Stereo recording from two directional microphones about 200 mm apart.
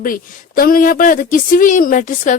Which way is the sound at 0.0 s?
45° left (ahead or behind).